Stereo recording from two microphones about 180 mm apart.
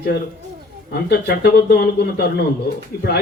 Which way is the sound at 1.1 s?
65° left (ahead or behind).